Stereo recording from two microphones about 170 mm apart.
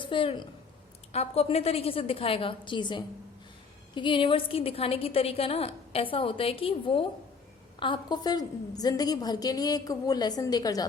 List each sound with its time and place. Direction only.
0.0 s a woman's voice: 30° left (ahead or behind)